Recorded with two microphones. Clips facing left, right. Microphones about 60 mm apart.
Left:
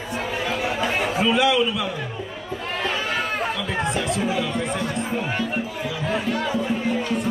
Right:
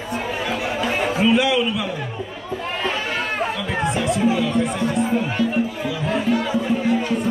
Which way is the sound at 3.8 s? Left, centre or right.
Right.